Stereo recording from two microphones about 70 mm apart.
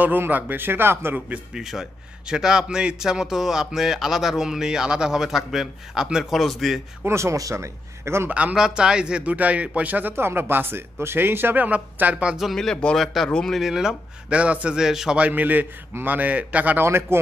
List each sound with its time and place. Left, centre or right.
0.0 s speech: right
1.5 s a man's voice: centre
7.1 s speech: right
8.3 s a man's voice: right
8.5 s a man's voice: centre
12.4 s a man's voice: centre
13.6 s a man's voice: centre
14.3 s a man's voice: centre
15.1 s a man's voice: right
16.8 s speech: right